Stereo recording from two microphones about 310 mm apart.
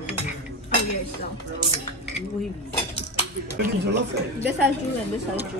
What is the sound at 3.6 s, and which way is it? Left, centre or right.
Speech, right.